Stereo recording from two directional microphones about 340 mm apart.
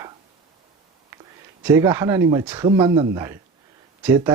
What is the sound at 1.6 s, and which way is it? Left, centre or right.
Speech, centre.